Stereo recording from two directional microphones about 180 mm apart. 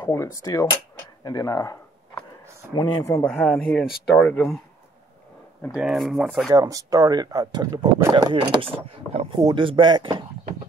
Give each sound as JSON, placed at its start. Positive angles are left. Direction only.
{"t": 0.0, "sound": "speech", "side_deg": 15}
{"t": 3.3, "sound": "speech", "side_deg": 0}
{"t": 5.8, "sound": "speech", "side_deg": -5}
{"t": 6.5, "sound": "speech", "side_deg": -20}